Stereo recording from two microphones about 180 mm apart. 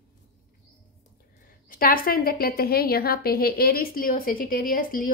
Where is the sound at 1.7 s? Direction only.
50° left (ahead or behind).